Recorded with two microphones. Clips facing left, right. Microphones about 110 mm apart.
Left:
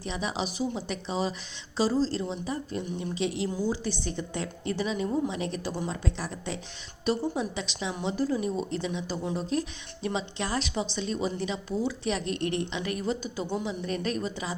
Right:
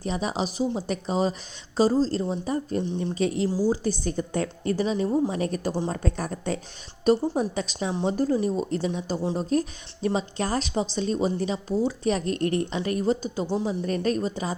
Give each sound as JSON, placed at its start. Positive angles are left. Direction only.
{"t": 0.0, "sound": "a woman's voice", "side_deg": -40}